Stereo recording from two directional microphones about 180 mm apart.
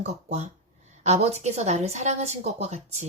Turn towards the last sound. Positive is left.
turn(degrees=-35)  # may be behind; listen again after turning